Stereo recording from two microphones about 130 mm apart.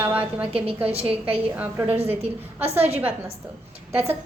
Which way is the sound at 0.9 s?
50° right (ahead or behind).